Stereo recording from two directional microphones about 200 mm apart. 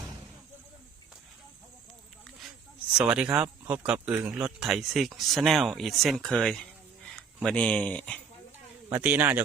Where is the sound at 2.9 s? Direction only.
5° right (ahead or behind).